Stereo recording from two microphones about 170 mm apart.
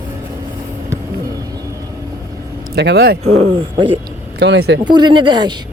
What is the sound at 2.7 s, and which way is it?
Speech, 80° right.